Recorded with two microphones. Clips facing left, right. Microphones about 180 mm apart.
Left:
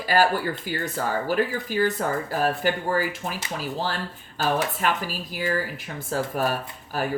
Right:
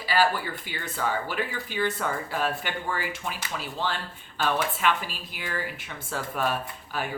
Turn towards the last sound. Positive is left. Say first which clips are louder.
# left 4 dB
turn(degrees=40)  # may be behind; listen again after turning